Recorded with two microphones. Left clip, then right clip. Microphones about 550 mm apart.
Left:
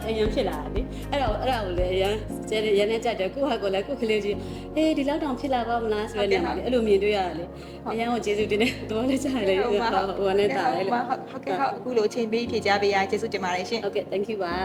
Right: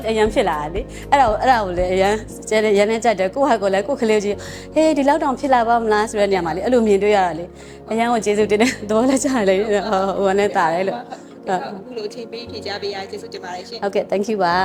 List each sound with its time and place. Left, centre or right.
0.1 s a woman's voice: right
13.8 s a woman's voice: right